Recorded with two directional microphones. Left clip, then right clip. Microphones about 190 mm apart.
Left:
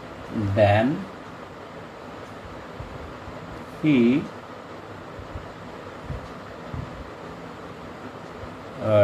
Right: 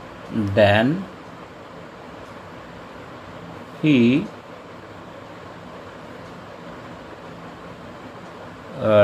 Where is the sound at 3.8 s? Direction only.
50° right (ahead or behind).